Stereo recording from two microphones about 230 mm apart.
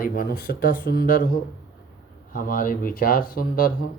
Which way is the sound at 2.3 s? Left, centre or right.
Left.